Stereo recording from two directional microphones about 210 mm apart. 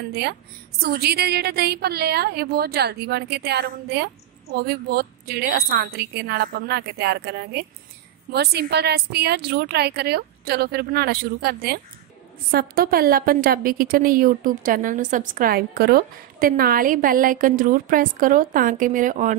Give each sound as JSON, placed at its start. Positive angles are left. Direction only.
{"t": 0.1, "sound": "a woman's voice", "side_deg": -50}